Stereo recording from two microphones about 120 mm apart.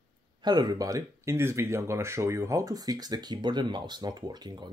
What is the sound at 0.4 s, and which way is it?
Speech, 35° right (ahead or behind).